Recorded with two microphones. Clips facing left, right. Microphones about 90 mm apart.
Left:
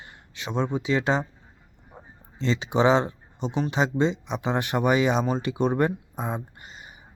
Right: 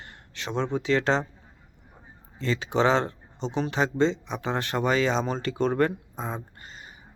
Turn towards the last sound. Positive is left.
turn(degrees=15)  # may be behind; listen again after turning